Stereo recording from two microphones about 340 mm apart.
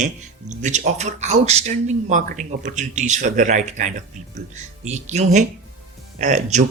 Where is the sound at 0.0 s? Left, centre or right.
Right.